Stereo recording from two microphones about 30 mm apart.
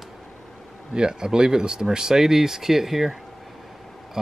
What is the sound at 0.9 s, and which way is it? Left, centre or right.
Speech, right.